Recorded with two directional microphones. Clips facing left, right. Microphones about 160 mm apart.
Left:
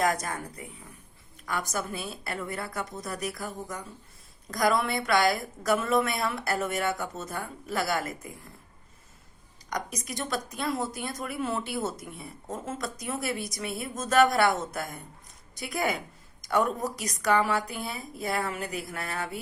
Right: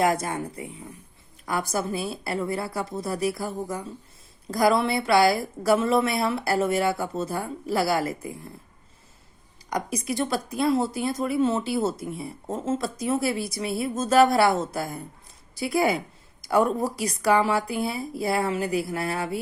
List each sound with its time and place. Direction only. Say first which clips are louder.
0.0 s a woman's voice: right 4 dB; 30° right (ahead or behind)
9.7 s a woman's voice: right 7 dB; 30° right (ahead or behind)